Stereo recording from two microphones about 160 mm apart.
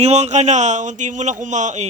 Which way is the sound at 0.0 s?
45° right (ahead or behind).